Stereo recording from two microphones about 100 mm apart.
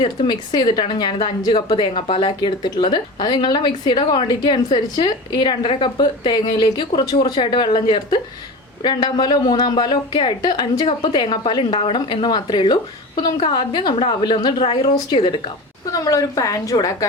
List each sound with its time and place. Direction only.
0.3 s a woman's voice: 45° left (ahead or behind)
15.9 s a woman's voice: 35° left (ahead or behind)